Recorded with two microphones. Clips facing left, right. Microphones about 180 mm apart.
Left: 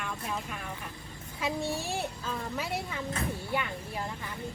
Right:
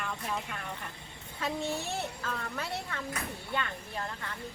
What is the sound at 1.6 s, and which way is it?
Speech, 20° right (ahead or behind).